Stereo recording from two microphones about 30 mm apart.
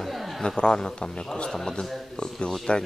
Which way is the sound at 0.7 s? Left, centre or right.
Left.